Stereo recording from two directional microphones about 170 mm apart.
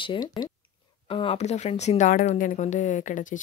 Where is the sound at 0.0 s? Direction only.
25° left (ahead or behind).